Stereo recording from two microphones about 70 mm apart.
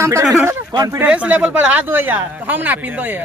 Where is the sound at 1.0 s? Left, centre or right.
Centre.